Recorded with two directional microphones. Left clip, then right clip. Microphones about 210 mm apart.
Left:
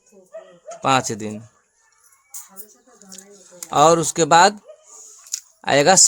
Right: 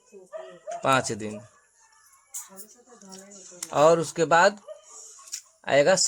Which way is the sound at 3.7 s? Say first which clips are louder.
Left 5 dB; 35° left (ahead or behind).